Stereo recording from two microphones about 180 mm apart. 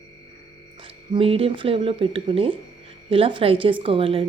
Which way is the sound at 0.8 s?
30° right (ahead or behind).